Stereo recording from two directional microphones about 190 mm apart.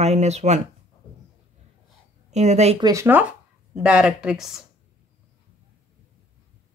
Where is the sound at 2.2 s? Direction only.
35° right (ahead or behind).